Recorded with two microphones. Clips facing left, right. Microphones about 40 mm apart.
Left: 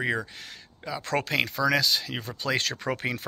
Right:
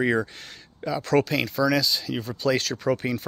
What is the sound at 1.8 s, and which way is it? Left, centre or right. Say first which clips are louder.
Speech: right 1 dB; left.